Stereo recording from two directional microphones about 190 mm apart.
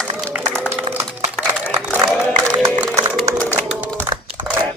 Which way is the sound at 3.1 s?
10° left (ahead or behind).